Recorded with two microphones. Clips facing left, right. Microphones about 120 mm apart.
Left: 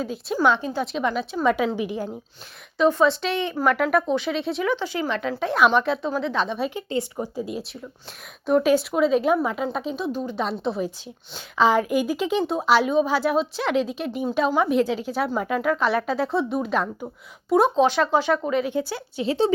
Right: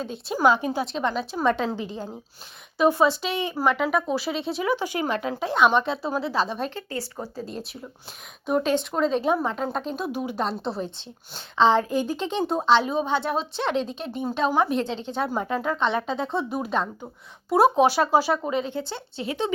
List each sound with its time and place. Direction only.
0.0 s speech: 5° left (ahead or behind)
0.4 s speech: 10° right (ahead or behind)
0.9 s speech: 5° left (ahead or behind)
2.7 s speech: 10° right (ahead or behind)
4.9 s speech: 45° right (ahead or behind)
5.4 s speech: centre (ahead or behind)
6.7 s speech: 15° left (ahead or behind)
8.6 s speech: 5° left (ahead or behind)
10.1 s speech: 10° right (ahead or behind)
10.4 s speech: centre (ahead or behind)
18.6 s speech: 10° left (ahead or behind)
18.9 s speech: 25° right (ahead or behind)
19.2 s a woman's voice: 30° left (ahead or behind)